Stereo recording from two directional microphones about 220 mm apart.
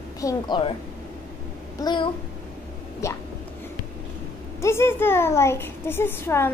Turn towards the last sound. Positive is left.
turn(degrees=10)  # may be behind; listen again after turning